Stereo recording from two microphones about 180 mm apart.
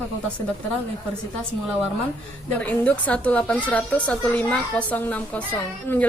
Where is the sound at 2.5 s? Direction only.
5° left (ahead or behind).